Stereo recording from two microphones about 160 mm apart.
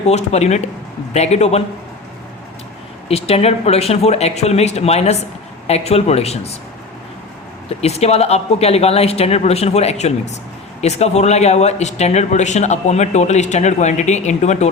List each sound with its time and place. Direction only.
0.1 s speech: 45° left (ahead or behind)
3.1 s speech: 40° left (ahead or behind)
7.7 s speech: 40° left (ahead or behind)